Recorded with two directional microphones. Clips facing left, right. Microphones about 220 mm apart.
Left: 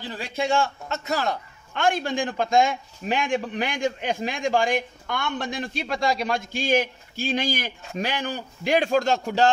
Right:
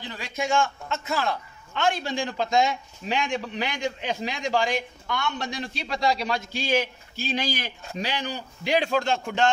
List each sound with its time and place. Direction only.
0.2 s a man's voice: 35° left (ahead or behind)
1.7 s a man's voice: 50° left (ahead or behind)